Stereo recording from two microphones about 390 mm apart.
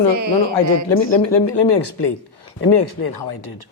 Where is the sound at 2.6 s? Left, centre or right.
Left.